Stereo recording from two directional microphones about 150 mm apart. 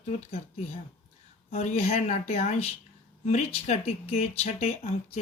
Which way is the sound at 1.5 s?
45° left (ahead or behind).